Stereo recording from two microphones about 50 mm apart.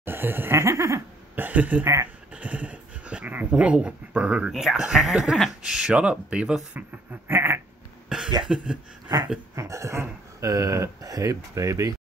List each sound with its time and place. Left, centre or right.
0.0 s laughter: right
0.6 s speech: right
1.3 s speech: right
2.3 s dog: right
3.3 s speech: right
4.5 s speech: centre; by 6.5 s right
7.1 s a sound: right
8.1 s cough: centre
9.6 s speech: right